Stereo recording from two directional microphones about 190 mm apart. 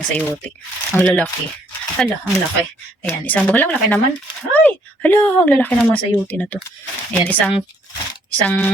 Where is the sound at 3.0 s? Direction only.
10° left (ahead or behind).